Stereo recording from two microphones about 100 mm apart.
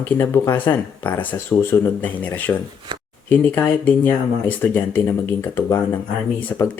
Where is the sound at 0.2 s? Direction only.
20° left (ahead or behind).